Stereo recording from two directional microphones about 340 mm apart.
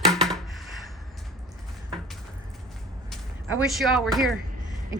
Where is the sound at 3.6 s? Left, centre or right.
Centre.